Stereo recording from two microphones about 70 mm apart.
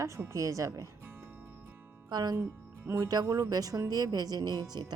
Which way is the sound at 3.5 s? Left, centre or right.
Right.